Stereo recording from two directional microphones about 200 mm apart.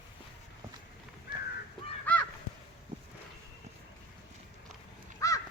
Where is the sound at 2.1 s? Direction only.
10° left (ahead or behind).